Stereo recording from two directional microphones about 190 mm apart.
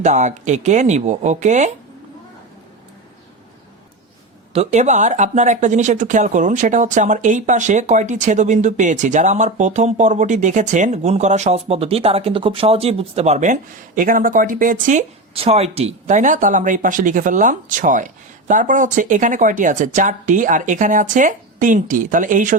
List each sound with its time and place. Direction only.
0.0 s speech: 40° right (ahead or behind)
4.5 s speech: 35° right (ahead or behind)